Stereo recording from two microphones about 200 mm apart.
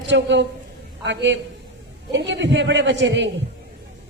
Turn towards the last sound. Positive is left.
turn(degrees=-60)  # may be behind; listen again after turning